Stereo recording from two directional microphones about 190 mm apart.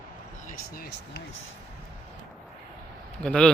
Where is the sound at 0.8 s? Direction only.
50° left (ahead or behind).